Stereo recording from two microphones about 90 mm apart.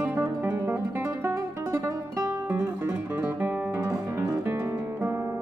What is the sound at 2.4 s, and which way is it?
Guitar, 25° right (ahead or behind).